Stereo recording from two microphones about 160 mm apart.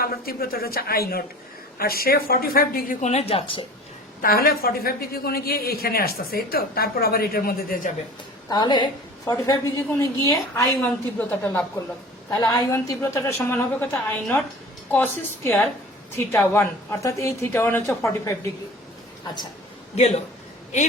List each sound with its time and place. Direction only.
0.0 s a woman's voice: 70° left (ahead or behind)
3.0 s a woman's voice: 45° left (ahead or behind)
4.2 s a woman's voice: 65° left (ahead or behind)
8.4 s a woman's voice: 25° left (ahead or behind); by 11.6 s 10° left (ahead or behind)
12.3 s a woman's voice: 20° left (ahead or behind)